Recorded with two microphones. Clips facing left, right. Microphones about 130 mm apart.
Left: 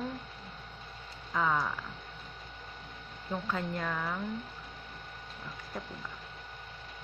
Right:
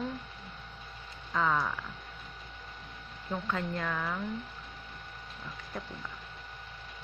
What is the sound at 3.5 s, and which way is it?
Speech, 20° left (ahead or behind).